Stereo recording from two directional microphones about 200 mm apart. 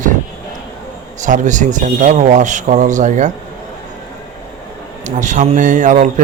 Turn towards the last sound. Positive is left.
turn(degrees=-40)  # may be behind; listen again after turning